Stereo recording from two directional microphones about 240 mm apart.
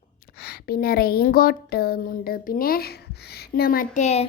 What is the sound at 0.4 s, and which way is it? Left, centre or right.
Speech, left.